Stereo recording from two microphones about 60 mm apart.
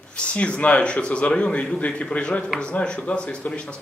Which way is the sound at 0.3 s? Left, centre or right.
Left.